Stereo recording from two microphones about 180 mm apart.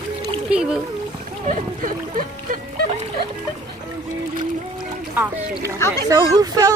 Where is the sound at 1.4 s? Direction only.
45° right (ahead or behind).